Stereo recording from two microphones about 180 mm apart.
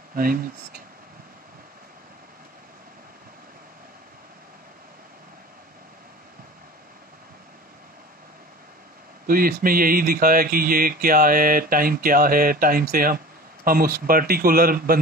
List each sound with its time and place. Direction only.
0.1 s speech: 55° right (ahead or behind)
9.2 s speech: 55° right (ahead or behind)